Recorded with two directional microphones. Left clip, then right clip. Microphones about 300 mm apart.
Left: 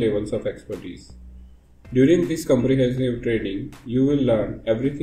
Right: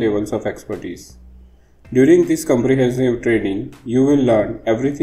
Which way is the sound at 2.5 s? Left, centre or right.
Right.